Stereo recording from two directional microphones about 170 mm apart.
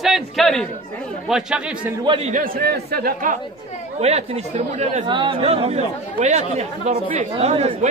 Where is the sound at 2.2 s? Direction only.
50° right (ahead or behind).